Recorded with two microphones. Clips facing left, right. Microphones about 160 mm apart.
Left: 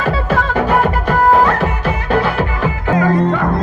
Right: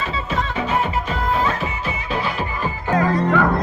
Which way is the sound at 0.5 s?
65° left (ahead or behind).